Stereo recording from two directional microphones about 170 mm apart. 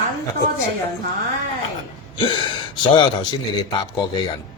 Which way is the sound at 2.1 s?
30° left (ahead or behind).